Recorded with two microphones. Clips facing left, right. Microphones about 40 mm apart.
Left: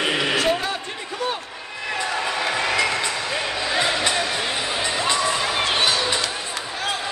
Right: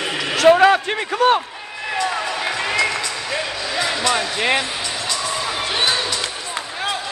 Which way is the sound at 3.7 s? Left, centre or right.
Left.